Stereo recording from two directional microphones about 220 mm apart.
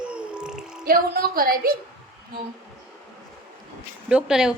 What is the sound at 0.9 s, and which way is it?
Speech, 40° right (ahead or behind).